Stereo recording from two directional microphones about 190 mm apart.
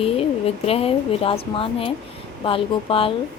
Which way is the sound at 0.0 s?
30° left (ahead or behind).